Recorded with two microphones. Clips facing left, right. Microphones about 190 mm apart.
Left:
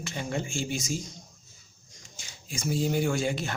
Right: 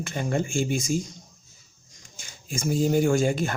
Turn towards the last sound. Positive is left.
turn(degrees=-45)  # may be behind; listen again after turning